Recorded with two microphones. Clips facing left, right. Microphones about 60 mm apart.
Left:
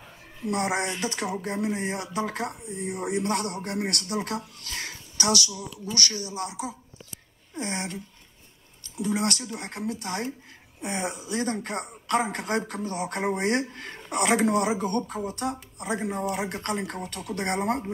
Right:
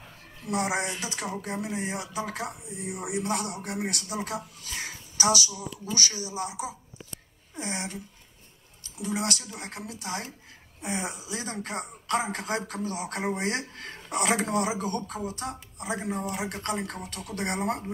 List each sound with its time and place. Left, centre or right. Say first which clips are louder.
0.5 s speech: left 2 dB; centre
9.0 s speech: left 3 dB; centre
9.7 s speech: left 9 dB; left
10.8 s speech: left 2 dB; centre
13.8 s a sound: left 2 dB; centre
14.1 s speech: left 3 dB; centre
17.0 s speech: left 3 dB; centre
17.6 s speech: left 3 dB; centre